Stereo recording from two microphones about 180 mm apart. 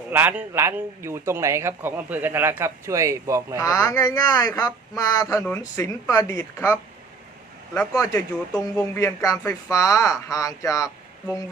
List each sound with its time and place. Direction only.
0.1 s a man's voice: 10° right (ahead or behind)
3.6 s speech: 20° left (ahead or behind)
7.9 s speech: 20° left (ahead or behind)